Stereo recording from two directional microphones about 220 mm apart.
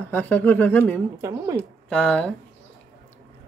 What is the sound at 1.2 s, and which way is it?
Speech, 15° right (ahead or behind).